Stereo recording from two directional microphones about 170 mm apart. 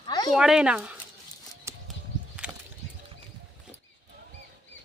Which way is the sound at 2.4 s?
5° right (ahead or behind).